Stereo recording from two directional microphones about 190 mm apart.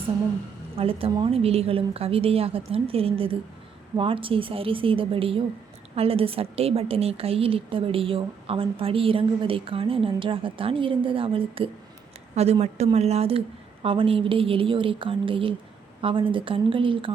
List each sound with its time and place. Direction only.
0.8 s a woman's voice: 30° right (ahead or behind)